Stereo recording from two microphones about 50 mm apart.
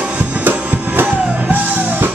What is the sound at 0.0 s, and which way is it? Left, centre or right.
Music, right.